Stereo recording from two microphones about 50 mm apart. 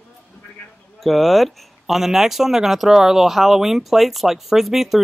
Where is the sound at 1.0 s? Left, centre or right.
Centre.